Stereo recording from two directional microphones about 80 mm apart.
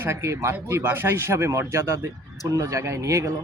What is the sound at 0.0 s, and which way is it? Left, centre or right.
A man's voice, right.